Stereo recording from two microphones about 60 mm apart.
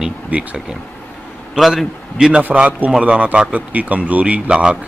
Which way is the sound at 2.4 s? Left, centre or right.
Right.